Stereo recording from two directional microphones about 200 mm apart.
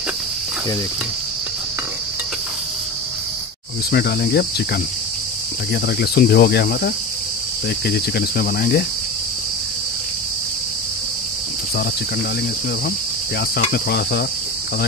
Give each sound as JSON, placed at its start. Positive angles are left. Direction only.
{"t": 3.9, "sound": "cricket", "side_deg": 50}
{"t": 5.9, "sound": "cricket", "side_deg": 50}
{"t": 13.6, "sound": "cricket", "side_deg": 50}